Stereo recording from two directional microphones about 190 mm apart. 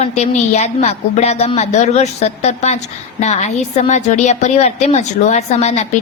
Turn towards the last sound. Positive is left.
turn(degrees=35)  # may be behind; listen again after turning